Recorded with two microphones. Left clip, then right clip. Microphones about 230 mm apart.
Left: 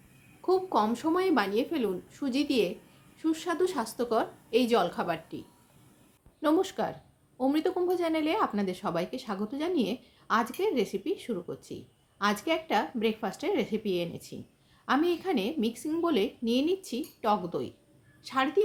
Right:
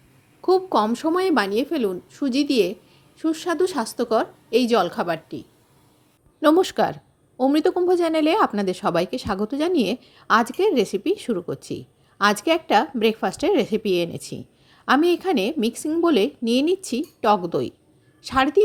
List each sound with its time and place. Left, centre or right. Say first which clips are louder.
0.4 s a woman's voice: right 7 dB; right